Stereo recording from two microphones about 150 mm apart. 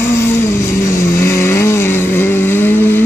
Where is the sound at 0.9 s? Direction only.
20° left (ahead or behind).